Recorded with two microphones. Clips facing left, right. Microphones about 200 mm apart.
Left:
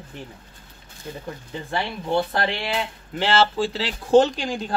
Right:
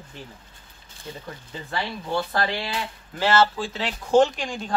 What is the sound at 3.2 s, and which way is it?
A man's voice, 30° left (ahead or behind).